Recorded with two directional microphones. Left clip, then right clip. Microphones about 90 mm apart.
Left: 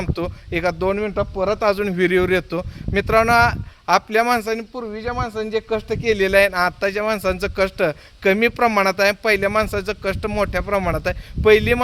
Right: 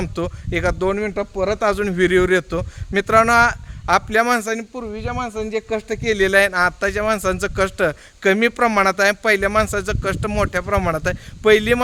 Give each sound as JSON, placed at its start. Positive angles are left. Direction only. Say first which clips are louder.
{"t": 0.0, "sound": "a man's voice", "louder": "right 1 dB", "side_deg": -45}
{"t": 4.7, "sound": "speech", "louder": "left 1 dB", "side_deg": -25}
{"t": 5.1, "sound": "a man's voice", "louder": "left 1 dB", "side_deg": -30}